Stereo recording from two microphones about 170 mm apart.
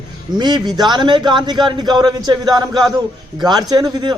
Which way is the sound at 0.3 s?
25° right (ahead or behind).